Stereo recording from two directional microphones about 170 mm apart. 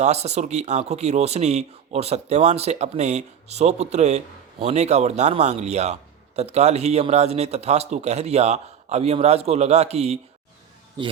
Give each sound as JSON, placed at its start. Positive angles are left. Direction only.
{"t": 0.0, "sound": "speech", "side_deg": -40}